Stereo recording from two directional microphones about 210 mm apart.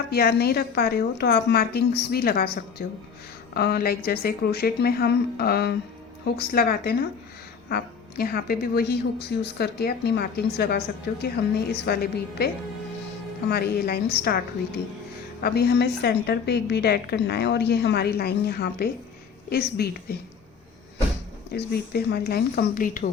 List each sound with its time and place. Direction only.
0.1 s a woman's voice: 50° left (ahead or behind)
13.5 s a woman's voice: 50° left (ahead or behind)
15.4 s a woman's voice: 50° left (ahead or behind)
21.5 s a woman's voice: 50° left (ahead or behind)